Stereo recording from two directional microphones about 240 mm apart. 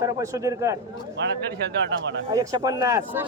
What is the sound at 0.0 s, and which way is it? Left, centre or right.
Speech, centre.